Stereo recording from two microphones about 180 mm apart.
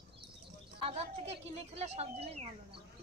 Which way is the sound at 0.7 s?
30° right (ahead or behind).